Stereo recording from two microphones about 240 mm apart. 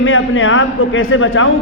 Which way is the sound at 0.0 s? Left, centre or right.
Left.